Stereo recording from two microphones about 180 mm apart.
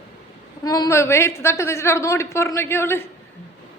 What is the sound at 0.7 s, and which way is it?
A woman's voice, 20° left (ahead or behind).